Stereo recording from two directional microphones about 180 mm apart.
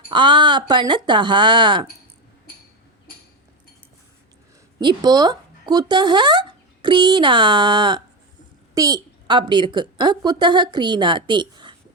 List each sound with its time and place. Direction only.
0.1 s a woman's voice: 25° right (ahead or behind)
4.8 s a woman's voice: 25° right (ahead or behind)